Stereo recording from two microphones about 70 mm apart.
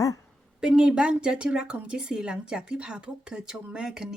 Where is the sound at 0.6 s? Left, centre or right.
Centre.